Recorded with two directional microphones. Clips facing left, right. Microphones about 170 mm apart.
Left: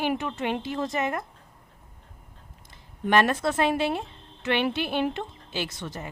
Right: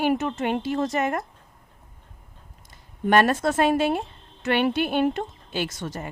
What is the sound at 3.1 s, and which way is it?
A woman's voice, 45° right (ahead or behind).